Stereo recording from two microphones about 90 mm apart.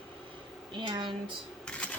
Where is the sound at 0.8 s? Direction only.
60° right (ahead or behind).